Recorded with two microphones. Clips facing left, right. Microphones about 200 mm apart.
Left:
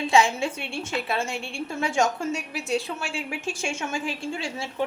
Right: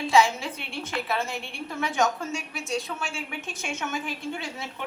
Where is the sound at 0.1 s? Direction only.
30° left (ahead or behind).